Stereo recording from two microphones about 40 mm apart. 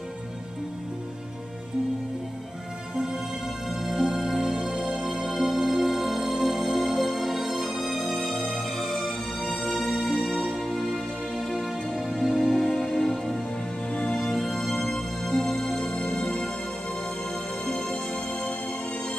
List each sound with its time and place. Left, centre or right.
3.8 s music: centre
12.5 s music: centre
17.8 s music: left